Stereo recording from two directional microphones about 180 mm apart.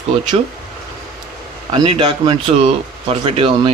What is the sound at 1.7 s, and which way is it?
Speech, 25° right (ahead or behind).